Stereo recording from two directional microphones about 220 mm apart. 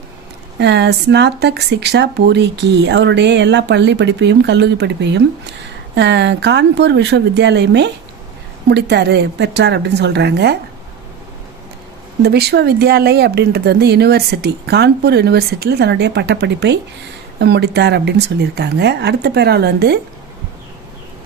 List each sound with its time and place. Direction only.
0.6 s speech: 50° right (ahead or behind)
12.2 s speech: 50° right (ahead or behind)